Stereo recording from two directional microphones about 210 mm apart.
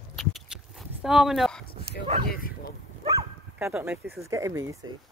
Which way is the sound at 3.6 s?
5° right (ahead or behind).